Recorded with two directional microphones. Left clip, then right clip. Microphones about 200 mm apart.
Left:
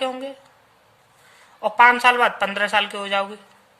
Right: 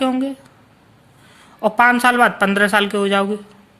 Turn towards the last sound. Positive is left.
turn(degrees=-15)  # may be behind; listen again after turning